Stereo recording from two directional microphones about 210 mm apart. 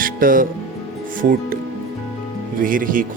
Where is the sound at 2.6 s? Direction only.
40° right (ahead or behind).